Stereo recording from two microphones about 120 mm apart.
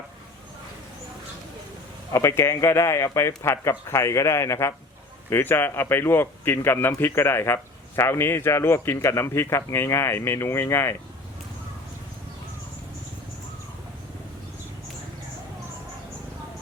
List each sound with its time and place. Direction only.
2.1 s a man's voice: 25° left (ahead or behind)